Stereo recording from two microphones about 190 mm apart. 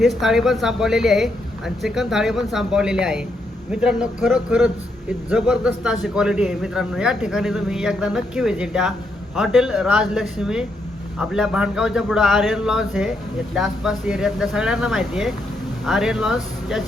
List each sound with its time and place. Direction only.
0.0 s a man's voice: centre (ahead or behind)